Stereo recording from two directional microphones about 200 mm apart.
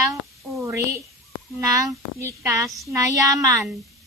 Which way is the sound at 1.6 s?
15° right (ahead or behind).